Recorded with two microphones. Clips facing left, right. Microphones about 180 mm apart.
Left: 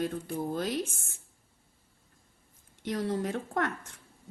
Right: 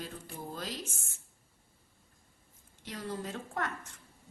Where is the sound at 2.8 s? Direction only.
70° left (ahead or behind).